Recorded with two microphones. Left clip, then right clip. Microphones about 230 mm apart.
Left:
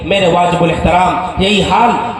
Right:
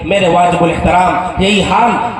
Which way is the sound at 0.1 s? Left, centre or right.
Left.